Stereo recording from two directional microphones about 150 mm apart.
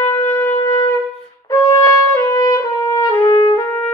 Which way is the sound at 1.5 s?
20° left (ahead or behind).